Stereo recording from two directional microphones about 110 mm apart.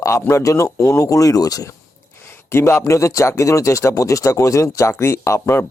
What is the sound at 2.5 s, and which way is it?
Speech, 20° left (ahead or behind).